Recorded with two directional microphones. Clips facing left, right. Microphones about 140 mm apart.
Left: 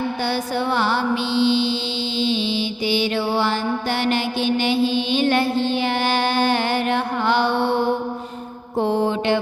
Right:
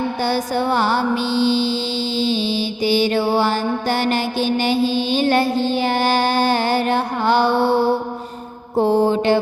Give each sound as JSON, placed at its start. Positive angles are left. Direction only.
{"t": 0.2, "sound": "mantra", "side_deg": -40}